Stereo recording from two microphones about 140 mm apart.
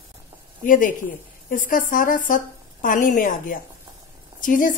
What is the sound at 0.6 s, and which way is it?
A woman's voice, 70° left (ahead or behind).